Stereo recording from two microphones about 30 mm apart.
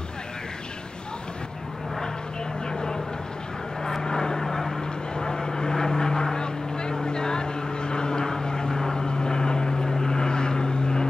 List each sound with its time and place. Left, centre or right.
2.7 s vehicle: left
4.4 s vehicle: centre
5.1 s vehicle: left